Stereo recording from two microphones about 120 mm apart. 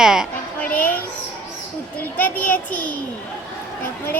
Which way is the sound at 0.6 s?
15° left (ahead or behind).